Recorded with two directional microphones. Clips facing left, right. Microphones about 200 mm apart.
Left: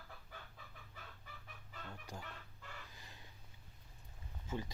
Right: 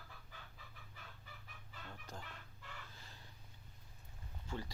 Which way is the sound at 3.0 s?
15° left (ahead or behind).